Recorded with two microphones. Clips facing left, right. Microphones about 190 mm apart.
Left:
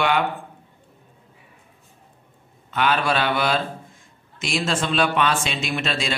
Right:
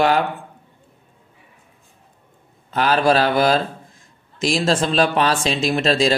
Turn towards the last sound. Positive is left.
turn(degrees=-35)  # may be behind; listen again after turning